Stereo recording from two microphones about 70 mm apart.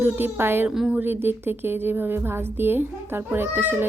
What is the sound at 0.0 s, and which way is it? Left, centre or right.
A woman's voice, right.